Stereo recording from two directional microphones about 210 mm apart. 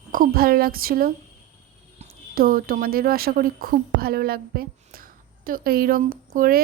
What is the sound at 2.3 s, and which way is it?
Speech, 45° right (ahead or behind).